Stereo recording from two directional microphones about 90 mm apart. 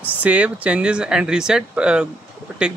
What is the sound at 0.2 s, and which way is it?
Speech, 15° right (ahead or behind).